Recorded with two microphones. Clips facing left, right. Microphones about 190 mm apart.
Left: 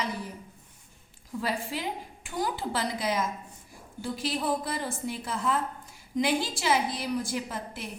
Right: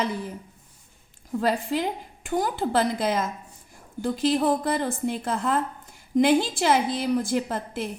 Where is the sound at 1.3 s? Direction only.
55° right (ahead or behind).